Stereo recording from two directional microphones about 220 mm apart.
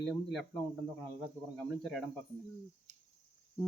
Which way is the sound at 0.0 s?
Centre (ahead or behind).